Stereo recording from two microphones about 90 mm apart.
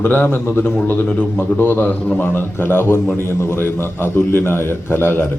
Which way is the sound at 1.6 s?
25° left (ahead or behind).